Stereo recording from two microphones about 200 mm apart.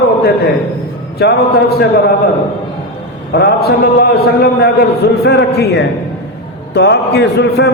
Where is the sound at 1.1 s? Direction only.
50° left (ahead or behind).